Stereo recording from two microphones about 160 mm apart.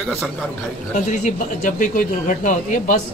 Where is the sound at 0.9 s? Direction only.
50° left (ahead or behind).